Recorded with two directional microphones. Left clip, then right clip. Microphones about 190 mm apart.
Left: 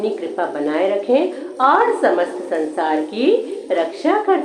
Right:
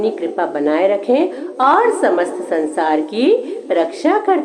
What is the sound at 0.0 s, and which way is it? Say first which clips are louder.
Speech: right 3 dB; 40° right (ahead or behind).